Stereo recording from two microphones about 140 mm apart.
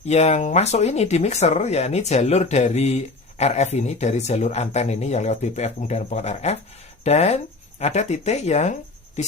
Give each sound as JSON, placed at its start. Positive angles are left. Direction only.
{"t": 0.0, "sound": "speech", "side_deg": 50}